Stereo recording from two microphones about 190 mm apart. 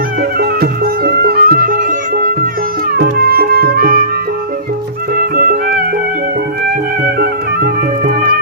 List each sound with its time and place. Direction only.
0.2 s music: 55° right (ahead or behind)
5.1 s music: 50° right (ahead or behind)
7.0 s music: 55° right (ahead or behind)